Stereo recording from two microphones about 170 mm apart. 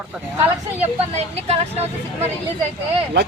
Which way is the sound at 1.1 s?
35° right (ahead or behind).